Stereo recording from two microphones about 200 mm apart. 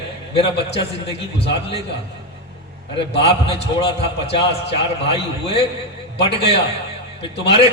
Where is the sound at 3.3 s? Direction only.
30° left (ahead or behind).